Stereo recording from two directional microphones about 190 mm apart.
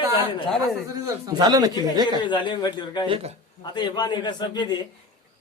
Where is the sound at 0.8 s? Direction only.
15° right (ahead or behind).